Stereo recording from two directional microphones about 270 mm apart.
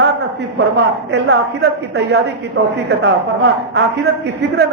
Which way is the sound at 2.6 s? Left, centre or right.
Right.